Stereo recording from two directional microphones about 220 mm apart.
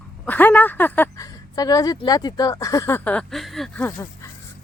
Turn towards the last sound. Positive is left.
turn(degrees=10)  # may be behind; listen again after turning